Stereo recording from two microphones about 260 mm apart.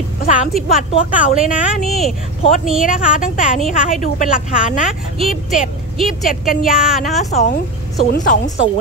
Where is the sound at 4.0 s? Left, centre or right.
Left.